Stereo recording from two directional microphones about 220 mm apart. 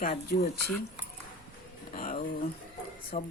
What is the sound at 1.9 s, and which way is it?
Speech, 40° left (ahead or behind).